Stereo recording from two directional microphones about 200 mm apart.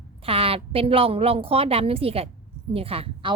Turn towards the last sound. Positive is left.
turn(degrees=-25)  # may be behind; listen again after turning